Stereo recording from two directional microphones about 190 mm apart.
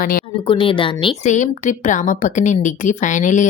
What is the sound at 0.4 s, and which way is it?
Speech, 30° left (ahead or behind).